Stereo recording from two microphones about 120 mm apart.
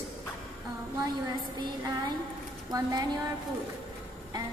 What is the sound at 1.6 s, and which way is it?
A woman's voice, 35° right (ahead or behind).